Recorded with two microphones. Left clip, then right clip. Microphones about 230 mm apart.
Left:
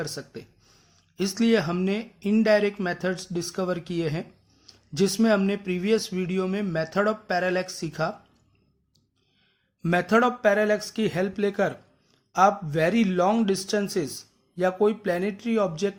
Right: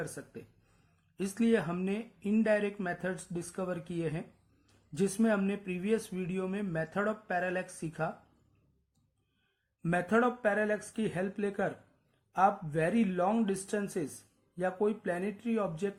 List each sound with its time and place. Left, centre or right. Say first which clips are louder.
0.0 s speech: left 8 dB; left
9.8 s speech: left 8 dB; left